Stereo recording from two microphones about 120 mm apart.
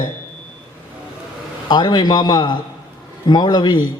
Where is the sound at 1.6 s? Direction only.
35° left (ahead or behind).